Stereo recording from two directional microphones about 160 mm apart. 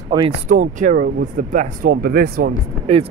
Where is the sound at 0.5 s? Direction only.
50° right (ahead or behind); by 2.5 s 70° right (ahead or behind).